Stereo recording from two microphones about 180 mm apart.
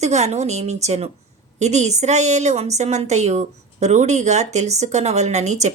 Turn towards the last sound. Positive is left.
turn(degrees=-40)  # may be behind; listen again after turning